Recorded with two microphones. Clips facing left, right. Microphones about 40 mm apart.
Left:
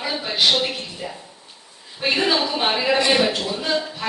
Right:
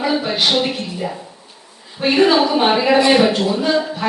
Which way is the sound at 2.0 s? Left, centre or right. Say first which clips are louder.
Right 7 dB; centre.